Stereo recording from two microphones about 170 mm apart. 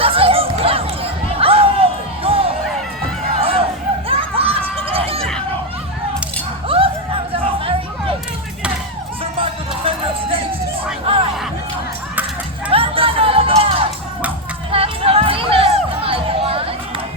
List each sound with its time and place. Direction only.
0.0 s music: 35° right (ahead or behind)
3.3 s a sound: 35° right (ahead or behind)
6.7 s a sound: 35° right (ahead or behind)
9.4 s music: 35° right (ahead or behind)
12.7 s music: 35° right (ahead or behind)
14.7 s crowd: 35° right (ahead or behind)